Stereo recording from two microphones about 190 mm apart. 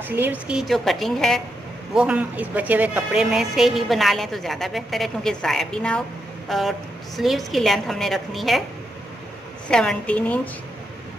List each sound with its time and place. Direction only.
0.1 s a woman's voice: 10° right (ahead or behind)
9.7 s a woman's voice: 5° left (ahead or behind)